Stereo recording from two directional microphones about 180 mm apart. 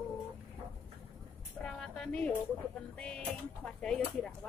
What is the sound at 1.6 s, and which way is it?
Speech, 5° left (ahead or behind).